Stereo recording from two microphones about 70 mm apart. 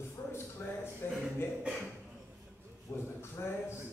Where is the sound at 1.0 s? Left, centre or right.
Left.